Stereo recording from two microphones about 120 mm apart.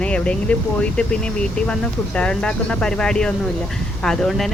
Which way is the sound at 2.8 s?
5° left (ahead or behind).